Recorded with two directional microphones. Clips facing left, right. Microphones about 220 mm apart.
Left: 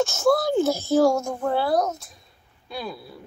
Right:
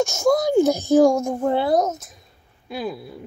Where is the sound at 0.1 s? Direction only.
15° right (ahead or behind).